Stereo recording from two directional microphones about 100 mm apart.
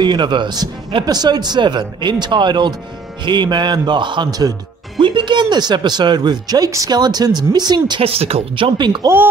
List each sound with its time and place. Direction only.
0.0 s speech: 50° right (ahead or behind)
5.0 s speech: 50° right (ahead or behind)
8.0 s speech: 75° right (ahead or behind); by 9.0 s 50° right (ahead or behind)